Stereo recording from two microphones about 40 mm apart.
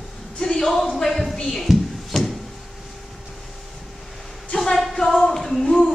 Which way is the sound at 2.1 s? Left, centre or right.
Centre.